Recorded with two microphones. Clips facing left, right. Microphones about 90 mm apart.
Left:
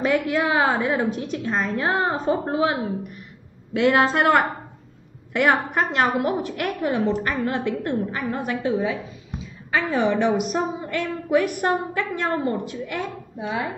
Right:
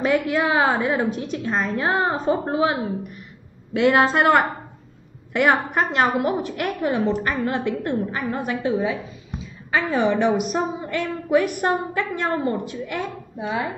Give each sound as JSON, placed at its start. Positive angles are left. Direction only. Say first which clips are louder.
{"t": 0.0, "sound": "a woman's voice", "louder": "right 1 dB", "side_deg": -20}